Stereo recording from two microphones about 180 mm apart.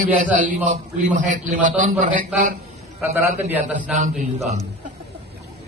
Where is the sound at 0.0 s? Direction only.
45° right (ahead or behind).